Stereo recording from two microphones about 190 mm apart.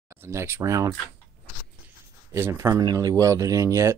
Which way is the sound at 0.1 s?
15° right (ahead or behind).